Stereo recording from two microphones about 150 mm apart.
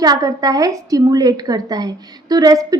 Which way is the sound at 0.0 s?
25° right (ahead or behind).